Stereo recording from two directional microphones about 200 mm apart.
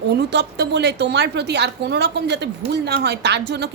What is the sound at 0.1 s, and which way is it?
A woman's voice, 60° right (ahead or behind).